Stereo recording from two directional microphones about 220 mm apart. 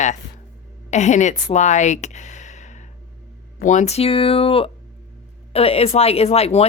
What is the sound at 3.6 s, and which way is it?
Speech, 30° left (ahead or behind).